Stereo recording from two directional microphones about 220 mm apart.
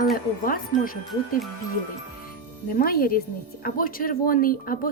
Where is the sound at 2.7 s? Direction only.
40° left (ahead or behind).